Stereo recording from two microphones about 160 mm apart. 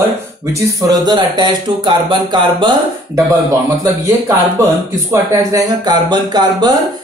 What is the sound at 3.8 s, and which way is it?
Speech, 20° right (ahead or behind).